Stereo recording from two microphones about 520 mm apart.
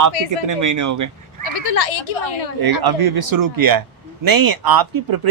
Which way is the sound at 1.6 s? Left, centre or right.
Left.